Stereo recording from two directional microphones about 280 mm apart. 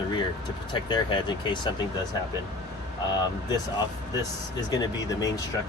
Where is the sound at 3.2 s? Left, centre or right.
Centre.